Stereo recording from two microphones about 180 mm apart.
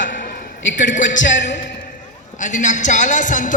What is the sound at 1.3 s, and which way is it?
Speech, 85° left.